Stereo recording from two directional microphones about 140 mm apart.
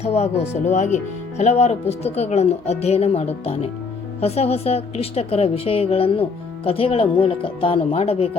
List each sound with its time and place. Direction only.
0.0 s speech: 50° left (ahead or behind)